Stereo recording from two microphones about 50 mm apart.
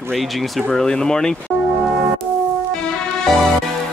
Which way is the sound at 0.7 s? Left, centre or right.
Centre.